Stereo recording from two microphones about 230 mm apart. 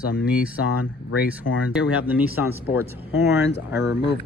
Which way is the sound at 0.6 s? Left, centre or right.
Left.